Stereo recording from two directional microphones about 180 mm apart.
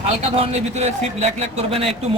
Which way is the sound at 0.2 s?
35° right (ahead or behind).